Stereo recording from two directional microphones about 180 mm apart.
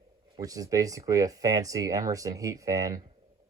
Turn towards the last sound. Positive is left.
turn(degrees=-20)  # may be behind; listen again after turning